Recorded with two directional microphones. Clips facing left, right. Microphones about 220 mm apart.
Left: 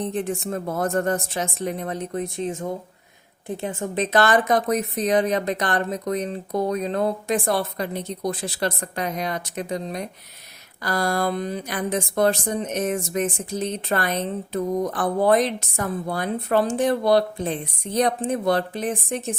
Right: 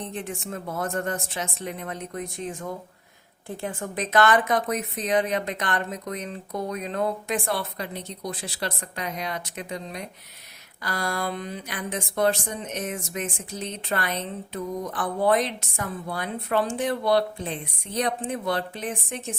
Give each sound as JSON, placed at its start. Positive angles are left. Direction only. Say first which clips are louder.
{"t": 0.1, "sound": "speech", "louder": "left 7 dB", "side_deg": 40}